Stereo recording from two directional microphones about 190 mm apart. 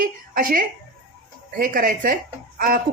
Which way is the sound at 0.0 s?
45° right (ahead or behind).